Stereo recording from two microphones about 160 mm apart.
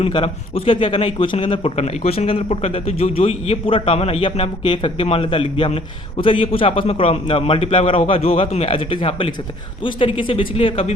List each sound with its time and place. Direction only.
0.0 s a man's voice: 35° left (ahead or behind)